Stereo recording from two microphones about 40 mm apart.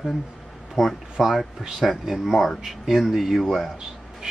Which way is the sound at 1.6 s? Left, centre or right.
Centre.